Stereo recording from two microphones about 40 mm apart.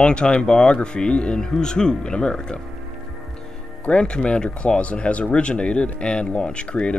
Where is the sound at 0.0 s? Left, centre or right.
Left.